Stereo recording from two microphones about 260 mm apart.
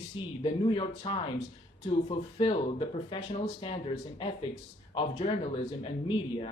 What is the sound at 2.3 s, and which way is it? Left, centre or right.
Speech, centre.